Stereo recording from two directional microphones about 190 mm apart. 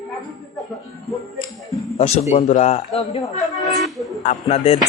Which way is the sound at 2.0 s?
35° left (ahead or behind).